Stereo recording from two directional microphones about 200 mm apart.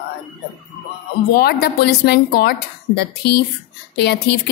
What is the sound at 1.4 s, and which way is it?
Speech, 50° left (ahead or behind).